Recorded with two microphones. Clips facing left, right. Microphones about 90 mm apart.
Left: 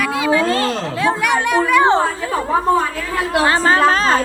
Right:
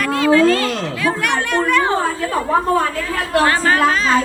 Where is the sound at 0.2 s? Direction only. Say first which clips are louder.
Right 5 dB; 15° left (ahead or behind).